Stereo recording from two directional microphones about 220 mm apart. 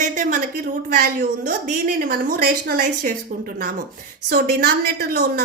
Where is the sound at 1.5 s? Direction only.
40° right (ahead or behind).